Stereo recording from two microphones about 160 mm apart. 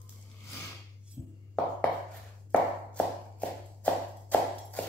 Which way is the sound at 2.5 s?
10° left (ahead or behind).